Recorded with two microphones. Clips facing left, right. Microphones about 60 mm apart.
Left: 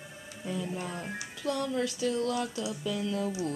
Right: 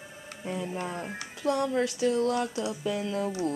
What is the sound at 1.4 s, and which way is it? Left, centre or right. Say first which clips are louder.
Speech: right 4 dB; right.